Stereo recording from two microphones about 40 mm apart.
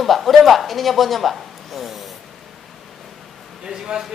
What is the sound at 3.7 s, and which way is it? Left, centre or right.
Speech, centre.